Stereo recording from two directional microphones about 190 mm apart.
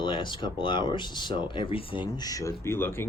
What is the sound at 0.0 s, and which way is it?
Speech, 25° left (ahead or behind).